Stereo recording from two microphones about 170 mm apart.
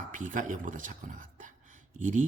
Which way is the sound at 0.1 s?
50° right (ahead or behind).